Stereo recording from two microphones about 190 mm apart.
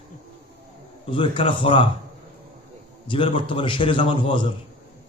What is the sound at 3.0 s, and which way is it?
A man's voice, 25° left (ahead or behind).